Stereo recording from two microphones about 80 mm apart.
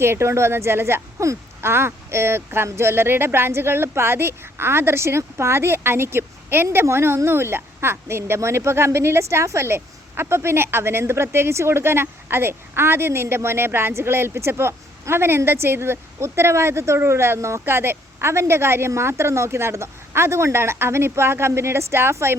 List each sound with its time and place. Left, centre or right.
0.0 s a woman's voice: right